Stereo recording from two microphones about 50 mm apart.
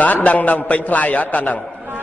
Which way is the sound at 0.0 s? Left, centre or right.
Left.